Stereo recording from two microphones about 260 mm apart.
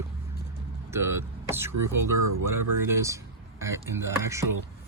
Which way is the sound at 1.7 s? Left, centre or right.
Right.